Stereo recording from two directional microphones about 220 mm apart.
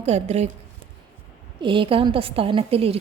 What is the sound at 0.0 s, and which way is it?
Speech, 30° right (ahead or behind).